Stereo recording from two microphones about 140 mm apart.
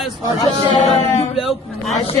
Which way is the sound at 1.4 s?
Centre (ahead or behind).